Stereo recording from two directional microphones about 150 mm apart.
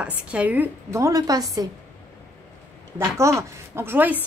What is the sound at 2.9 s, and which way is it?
A woman's voice, 20° right (ahead or behind).